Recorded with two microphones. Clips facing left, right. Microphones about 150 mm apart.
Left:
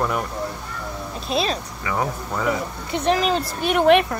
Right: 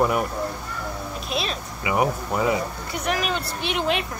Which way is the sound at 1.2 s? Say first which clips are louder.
Left 6 dB; 30° left (ahead or behind).